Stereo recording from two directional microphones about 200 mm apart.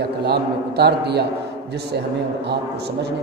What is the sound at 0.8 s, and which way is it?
Speech, 55° right (ahead or behind).